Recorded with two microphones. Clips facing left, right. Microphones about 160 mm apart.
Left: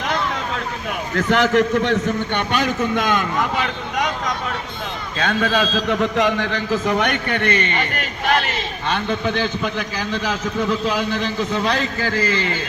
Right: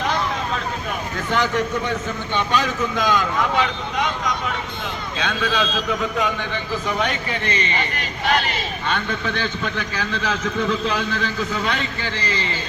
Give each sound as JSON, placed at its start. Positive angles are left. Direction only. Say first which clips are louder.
{"t": 1.3, "sound": "a man's voice", "louder": "left 5 dB", "side_deg": 80}
{"t": 5.2, "sound": "a man's voice", "louder": "left 4 dB", "side_deg": 50}
{"t": 6.0, "sound": "a man's voice", "louder": "left 5 dB", "side_deg": 75}
{"t": 9.6, "sound": "a man's voice", "louder": "left 2 dB", "side_deg": 10}
{"t": 11.6, "sound": "a man's voice", "louder": "left 4 dB", "side_deg": 35}